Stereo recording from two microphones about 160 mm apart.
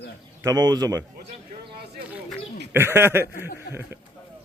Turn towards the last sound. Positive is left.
turn(degrees=-15)  # may be behind; listen again after turning